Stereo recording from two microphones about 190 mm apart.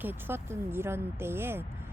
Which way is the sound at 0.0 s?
10° right (ahead or behind).